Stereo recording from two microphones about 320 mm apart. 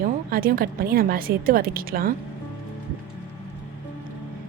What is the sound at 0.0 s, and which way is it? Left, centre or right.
A woman's voice, right.